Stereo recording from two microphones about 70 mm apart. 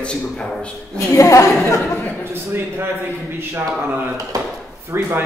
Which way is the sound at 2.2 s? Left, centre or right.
Right.